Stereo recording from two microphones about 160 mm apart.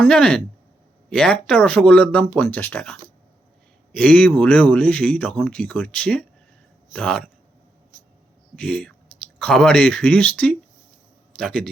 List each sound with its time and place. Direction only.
0.0 s a man's voice: 5° left (ahead or behind)
8.5 s a man's voice: 5° left (ahead or behind)